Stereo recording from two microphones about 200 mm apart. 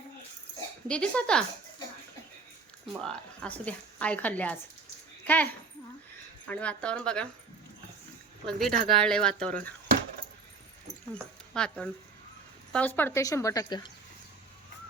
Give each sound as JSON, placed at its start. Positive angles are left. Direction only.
{"t": 0.9, "sound": "speech", "side_deg": 5}
{"t": 3.0, "sound": "a woman's voice", "side_deg": 5}
{"t": 6.5, "sound": "speech", "side_deg": 5}
{"t": 8.4, "sound": "speech", "side_deg": 0}
{"t": 8.7, "sound": "speech", "side_deg": -40}
{"t": 9.0, "sound": "speech", "side_deg": 5}
{"t": 11.5, "sound": "a woman's voice", "side_deg": 5}